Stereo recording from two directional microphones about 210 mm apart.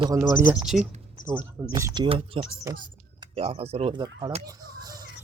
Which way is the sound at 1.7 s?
20° right (ahead or behind).